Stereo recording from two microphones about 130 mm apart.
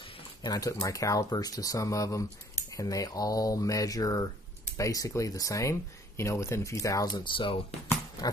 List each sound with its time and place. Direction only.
0.4 s speech: 30° left (ahead or behind)
7.2 s speech: 40° left (ahead or behind)